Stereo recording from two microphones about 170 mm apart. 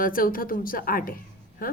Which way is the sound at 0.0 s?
55° left (ahead or behind).